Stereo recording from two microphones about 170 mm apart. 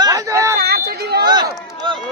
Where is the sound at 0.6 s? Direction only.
65° right (ahead or behind).